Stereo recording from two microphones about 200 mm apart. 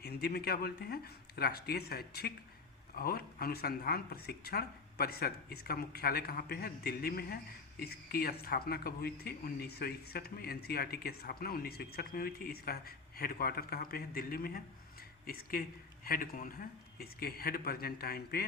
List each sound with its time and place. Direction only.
0.0 s speech: 55° left (ahead or behind)